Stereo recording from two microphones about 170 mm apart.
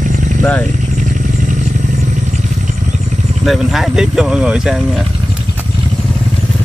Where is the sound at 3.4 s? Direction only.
Centre (ahead or behind).